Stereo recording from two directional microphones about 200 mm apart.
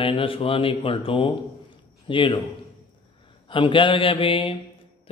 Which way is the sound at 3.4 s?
25° left (ahead or behind).